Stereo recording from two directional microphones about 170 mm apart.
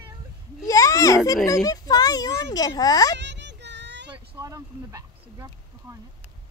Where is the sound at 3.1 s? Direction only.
90° right.